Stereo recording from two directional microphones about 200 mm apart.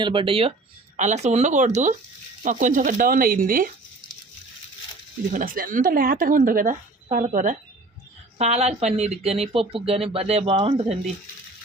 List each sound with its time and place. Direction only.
0.0 s speech: 25° right (ahead or behind); by 3.7 s 45° right (ahead or behind)
5.3 s speech: 45° right (ahead or behind)